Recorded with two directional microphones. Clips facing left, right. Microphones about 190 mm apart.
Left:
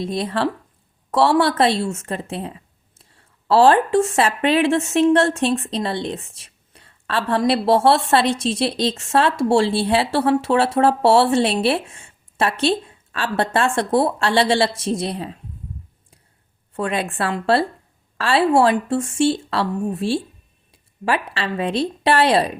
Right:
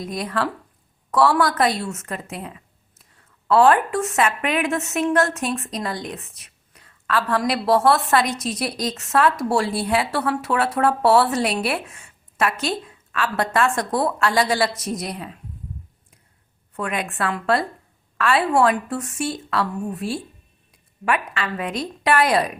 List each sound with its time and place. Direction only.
0.0 s a woman's voice: 25° left (ahead or behind)
16.7 s a woman's voice: 30° left (ahead or behind)